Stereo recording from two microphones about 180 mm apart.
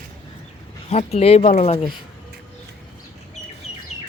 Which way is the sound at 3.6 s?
5° right (ahead or behind).